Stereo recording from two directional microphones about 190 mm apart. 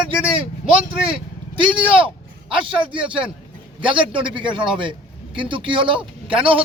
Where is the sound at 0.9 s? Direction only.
30° right (ahead or behind).